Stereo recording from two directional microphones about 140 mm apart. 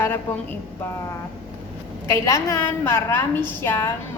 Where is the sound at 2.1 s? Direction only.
20° left (ahead or behind).